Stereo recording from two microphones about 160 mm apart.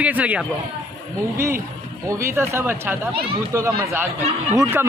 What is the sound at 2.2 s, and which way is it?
A man's voice, 15° right (ahead or behind).